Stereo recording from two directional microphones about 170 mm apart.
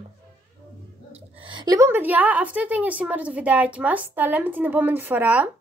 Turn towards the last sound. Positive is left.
turn(degrees=-10)  # may be behind; listen again after turning